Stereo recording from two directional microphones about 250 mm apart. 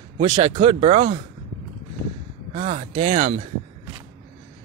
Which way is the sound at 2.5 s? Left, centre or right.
Right.